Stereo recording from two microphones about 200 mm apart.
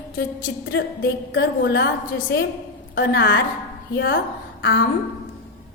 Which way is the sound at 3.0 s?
50° left (ahead or behind).